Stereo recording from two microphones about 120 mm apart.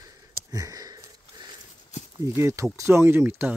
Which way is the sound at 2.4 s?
25° right (ahead or behind).